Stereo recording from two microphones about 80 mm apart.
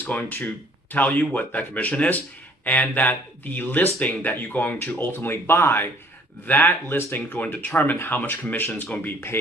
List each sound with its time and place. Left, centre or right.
0.0 s speech: left
9.3 s speech: left